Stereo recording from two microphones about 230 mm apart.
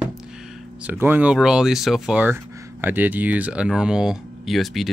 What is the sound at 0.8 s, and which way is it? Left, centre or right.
Speech, centre.